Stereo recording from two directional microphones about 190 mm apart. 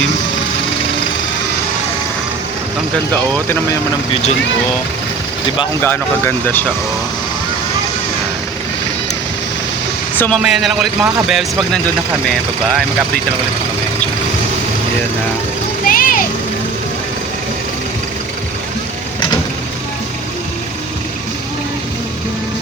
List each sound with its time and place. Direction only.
5.8 s speech: 10° left (ahead or behind)
10.2 s a man's voice: 5° left (ahead or behind)
15.9 s vehicle: 50° left (ahead or behind)